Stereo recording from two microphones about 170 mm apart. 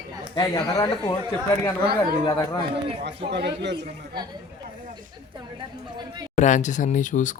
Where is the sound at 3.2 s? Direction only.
80° right.